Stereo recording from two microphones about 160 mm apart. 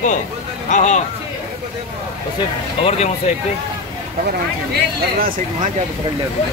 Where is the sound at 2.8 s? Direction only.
40° left (ahead or behind).